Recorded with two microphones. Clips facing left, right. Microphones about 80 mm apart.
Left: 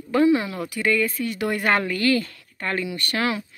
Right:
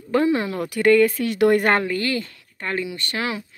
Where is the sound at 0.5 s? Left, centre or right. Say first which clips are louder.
Right 7 dB; right.